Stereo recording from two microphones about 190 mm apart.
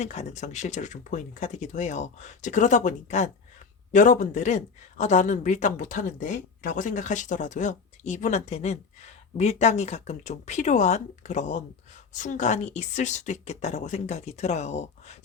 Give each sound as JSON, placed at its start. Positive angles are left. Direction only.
{"t": 0.0, "sound": "speech", "side_deg": 35}